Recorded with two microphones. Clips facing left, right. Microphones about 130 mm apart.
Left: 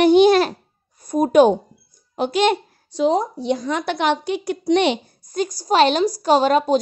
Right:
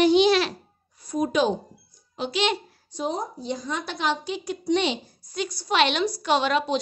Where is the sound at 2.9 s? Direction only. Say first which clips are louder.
Left 10 dB; 90° left; by 5.1 s 60° left (ahead or behind).